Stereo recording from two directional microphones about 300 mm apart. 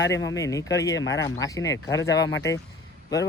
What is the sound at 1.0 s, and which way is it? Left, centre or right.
Speech, left.